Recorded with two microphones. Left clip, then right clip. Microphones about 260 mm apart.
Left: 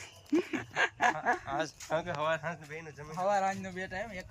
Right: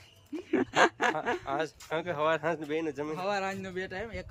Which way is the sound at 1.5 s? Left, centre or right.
Centre.